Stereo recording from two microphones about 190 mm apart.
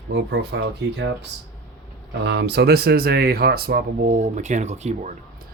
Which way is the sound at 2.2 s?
60° right (ahead or behind).